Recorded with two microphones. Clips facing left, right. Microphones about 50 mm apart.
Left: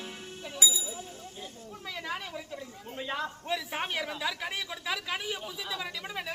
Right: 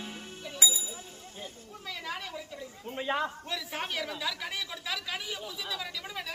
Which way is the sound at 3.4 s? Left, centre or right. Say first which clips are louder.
Left 3 dB; centre.